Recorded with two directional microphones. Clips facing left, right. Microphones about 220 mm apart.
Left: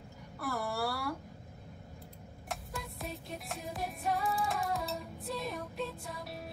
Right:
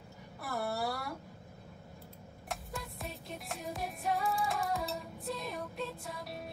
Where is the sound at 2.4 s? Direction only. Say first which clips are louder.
Even; centre (ahead or behind).